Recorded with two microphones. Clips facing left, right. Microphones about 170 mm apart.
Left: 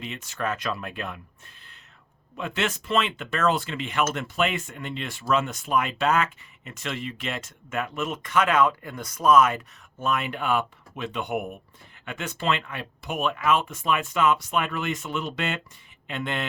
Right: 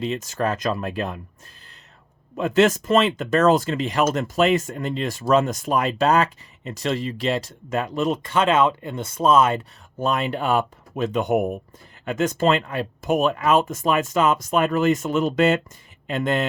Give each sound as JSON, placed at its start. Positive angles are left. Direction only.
{"t": 0.0, "sound": "speech", "side_deg": -40}
{"t": 2.3, "sound": "speech", "side_deg": -45}